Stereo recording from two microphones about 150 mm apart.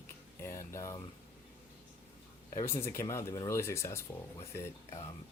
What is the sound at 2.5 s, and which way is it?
Speech, 20° left (ahead or behind).